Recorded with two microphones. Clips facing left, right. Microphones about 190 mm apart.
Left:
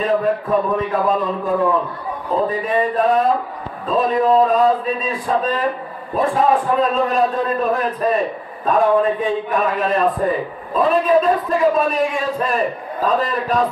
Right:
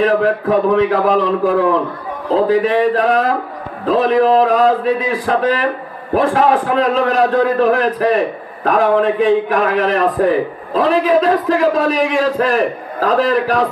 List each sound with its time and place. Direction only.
0.0 s a man's voice: 80° right